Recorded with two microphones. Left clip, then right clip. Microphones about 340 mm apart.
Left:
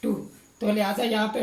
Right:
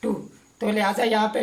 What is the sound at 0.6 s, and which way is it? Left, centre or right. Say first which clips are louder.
Speech: right 3 dB; right.